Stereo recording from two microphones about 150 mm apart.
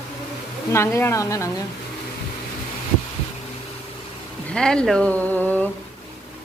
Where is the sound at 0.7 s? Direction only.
20° left (ahead or behind).